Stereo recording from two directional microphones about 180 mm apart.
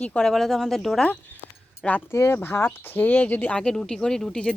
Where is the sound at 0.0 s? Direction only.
5° left (ahead or behind).